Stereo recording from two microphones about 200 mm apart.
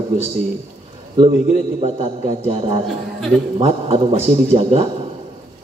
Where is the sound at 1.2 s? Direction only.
30° right (ahead or behind).